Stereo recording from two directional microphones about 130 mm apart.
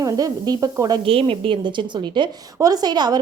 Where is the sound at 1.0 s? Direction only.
45° right (ahead or behind).